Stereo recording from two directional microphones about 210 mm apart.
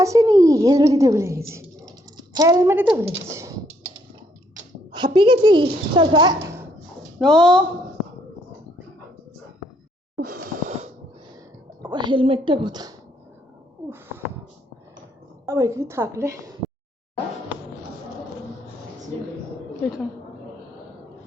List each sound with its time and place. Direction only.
0.0 s a woman's voice: 15° right (ahead or behind)
4.9 s a woman's voice: 20° right (ahead or behind)
7.2 s speech: 5° left (ahead or behind)
10.2 s a sound: 45° right (ahead or behind)
11.8 s a woman's voice: 20° right (ahead or behind)
15.4 s a woman's voice: 15° right (ahead or behind)